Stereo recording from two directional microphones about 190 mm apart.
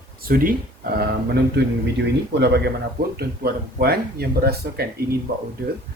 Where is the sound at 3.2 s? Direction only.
55° right (ahead or behind).